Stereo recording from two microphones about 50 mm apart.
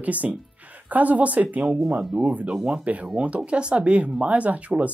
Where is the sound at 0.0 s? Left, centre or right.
Right.